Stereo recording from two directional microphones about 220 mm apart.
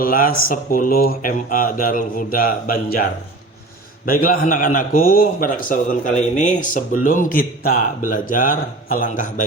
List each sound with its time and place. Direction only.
0.0 s a man's voice: 40° left (ahead or behind)
4.0 s a man's voice: 40° left (ahead or behind)